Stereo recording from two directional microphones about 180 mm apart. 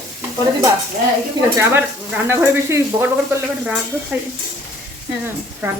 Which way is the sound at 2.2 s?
15° right (ahead or behind).